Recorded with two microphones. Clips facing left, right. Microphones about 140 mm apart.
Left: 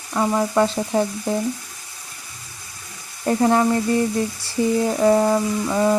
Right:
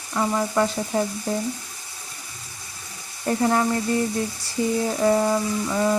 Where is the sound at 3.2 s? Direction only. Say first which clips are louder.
Left 4 dB; 30° left (ahead or behind).